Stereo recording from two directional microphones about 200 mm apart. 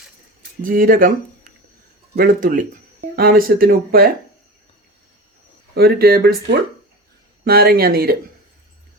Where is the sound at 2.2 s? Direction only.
45° right (ahead or behind).